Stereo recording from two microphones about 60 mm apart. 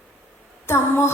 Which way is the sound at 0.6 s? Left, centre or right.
Left.